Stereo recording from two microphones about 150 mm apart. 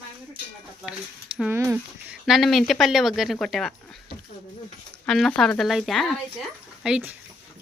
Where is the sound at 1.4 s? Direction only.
15° right (ahead or behind).